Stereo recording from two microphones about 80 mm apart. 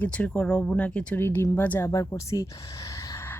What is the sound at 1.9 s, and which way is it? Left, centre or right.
Speech, left.